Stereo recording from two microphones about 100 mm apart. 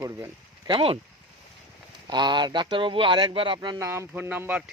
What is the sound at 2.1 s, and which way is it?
Speech, 50° right (ahead or behind).